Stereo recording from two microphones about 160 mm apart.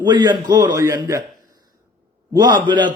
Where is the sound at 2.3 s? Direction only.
25° right (ahead or behind).